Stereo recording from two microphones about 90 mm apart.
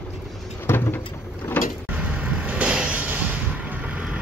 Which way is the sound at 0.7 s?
20° left (ahead or behind).